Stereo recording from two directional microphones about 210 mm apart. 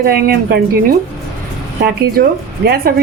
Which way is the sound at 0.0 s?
45° right (ahead or behind).